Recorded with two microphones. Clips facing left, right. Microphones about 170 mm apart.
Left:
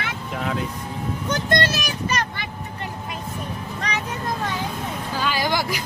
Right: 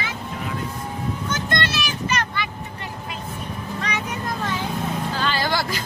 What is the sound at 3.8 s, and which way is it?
Vehicle, 35° left (ahead or behind).